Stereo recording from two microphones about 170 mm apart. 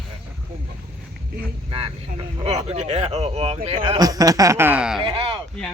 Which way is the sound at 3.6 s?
35° right (ahead or behind).